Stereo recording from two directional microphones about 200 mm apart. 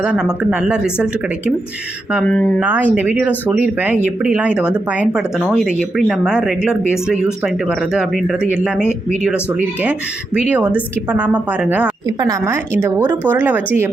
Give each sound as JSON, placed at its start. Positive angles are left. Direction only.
{"t": 0.0, "sound": "speech", "side_deg": -5}
{"t": 2.1, "sound": "speech", "side_deg": 5}
{"t": 2.6, "sound": "a woman's voice", "side_deg": -10}